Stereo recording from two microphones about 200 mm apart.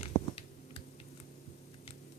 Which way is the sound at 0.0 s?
30° left (ahead or behind).